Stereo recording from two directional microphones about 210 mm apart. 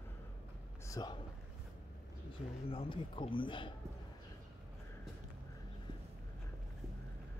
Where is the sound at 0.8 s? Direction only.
20° left (ahead or behind).